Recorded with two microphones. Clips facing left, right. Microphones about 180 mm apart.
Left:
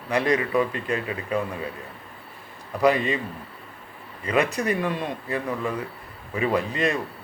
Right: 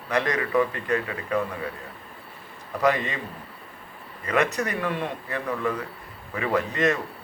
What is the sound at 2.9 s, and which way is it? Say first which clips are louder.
Speech: left 4 dB; 30° left (ahead or behind).